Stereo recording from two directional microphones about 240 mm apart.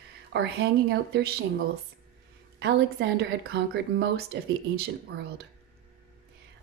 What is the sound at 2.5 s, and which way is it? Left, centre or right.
A woman's voice, right.